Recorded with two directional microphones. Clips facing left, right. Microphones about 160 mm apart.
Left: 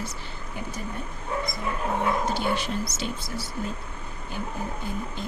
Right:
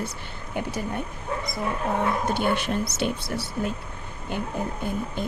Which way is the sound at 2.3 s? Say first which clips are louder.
Right 3 dB; 55° right (ahead or behind).